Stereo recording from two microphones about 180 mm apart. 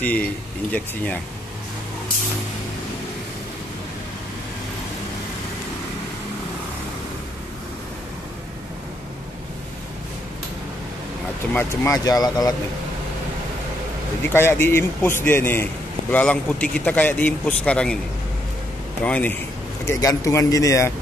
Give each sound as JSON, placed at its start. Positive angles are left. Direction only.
{"t": 0.0, "sound": "a man's voice", "side_deg": 10}
{"t": 11.5, "sound": "speech", "side_deg": 15}
{"t": 14.3, "sound": "a man's voice", "side_deg": 15}
{"t": 19.0, "sound": "a man's voice", "side_deg": 5}